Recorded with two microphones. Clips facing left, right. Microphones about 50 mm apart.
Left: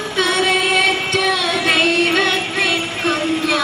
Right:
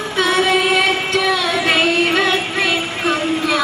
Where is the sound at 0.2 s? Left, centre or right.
Centre.